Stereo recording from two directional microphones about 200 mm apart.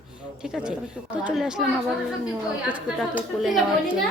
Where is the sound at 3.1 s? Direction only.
Centre (ahead or behind).